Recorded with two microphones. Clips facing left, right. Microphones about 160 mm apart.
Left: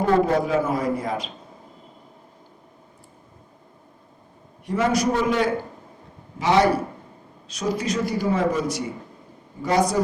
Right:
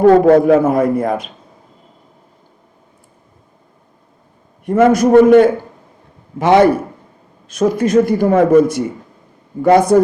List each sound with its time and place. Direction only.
0.0 s a man's voice: 55° right (ahead or behind)
4.6 s a man's voice: 50° right (ahead or behind)